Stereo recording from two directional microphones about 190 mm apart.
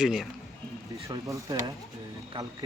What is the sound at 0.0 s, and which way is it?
Speech, centre (ahead or behind).